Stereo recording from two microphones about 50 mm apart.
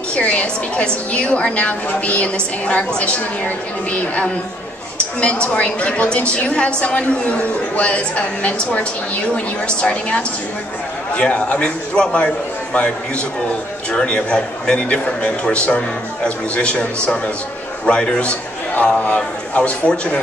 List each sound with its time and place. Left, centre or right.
0.1 s a woman's voice: left
13.9 s a woman's voice: centre